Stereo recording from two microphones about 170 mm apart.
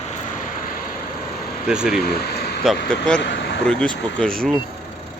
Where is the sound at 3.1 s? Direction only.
90° left.